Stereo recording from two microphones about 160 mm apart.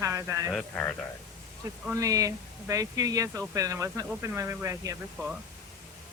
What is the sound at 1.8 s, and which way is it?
Speech, 15° right (ahead or behind).